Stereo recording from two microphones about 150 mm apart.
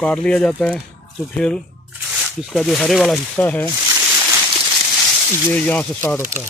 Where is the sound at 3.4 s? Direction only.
10° left (ahead or behind).